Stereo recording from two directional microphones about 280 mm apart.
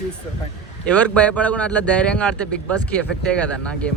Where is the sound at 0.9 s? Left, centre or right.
Centre.